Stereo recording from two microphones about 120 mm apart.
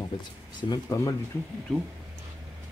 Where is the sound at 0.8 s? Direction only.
25° left (ahead or behind).